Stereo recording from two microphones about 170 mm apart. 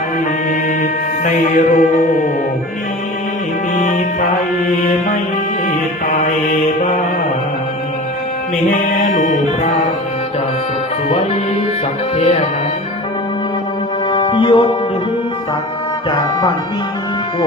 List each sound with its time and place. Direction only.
0.8 s music: 50° left (ahead or behind)
8.9 s music: 50° left (ahead or behind)
12.1 s music: 35° left (ahead or behind)
14.1 s music: 30° left (ahead or behind)